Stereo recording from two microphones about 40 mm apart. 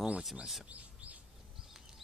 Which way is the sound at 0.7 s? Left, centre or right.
Right.